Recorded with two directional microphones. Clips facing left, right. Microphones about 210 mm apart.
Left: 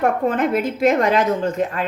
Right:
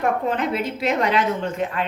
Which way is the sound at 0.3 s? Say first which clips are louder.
Left 4 dB; 50° left (ahead or behind).